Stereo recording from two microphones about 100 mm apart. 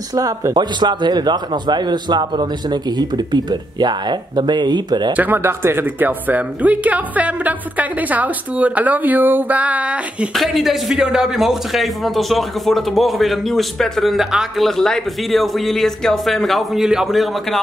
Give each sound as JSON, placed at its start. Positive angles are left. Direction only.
{"t": 0.1, "sound": "a man's voice", "side_deg": -35}
{"t": 5.1, "sound": "speech", "side_deg": -20}
{"t": 10.3, "sound": "a man's voice", "side_deg": 0}